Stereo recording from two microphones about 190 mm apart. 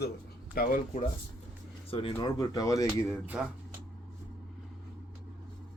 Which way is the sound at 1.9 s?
30° left (ahead or behind).